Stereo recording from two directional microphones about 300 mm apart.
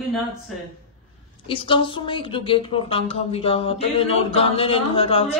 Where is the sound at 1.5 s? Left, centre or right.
Centre.